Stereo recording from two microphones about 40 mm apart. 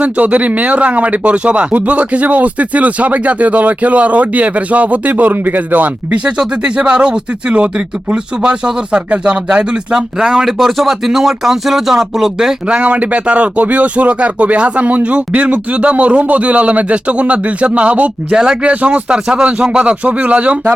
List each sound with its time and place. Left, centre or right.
0.0 s speech: right
6.1 s speech: right
9.0 s speech: right
9.2 s speech: right
10.6 s speech: centre
12.6 s speech: right
18.3 s speech: right
18.7 s speech: right
20.1 s speech: right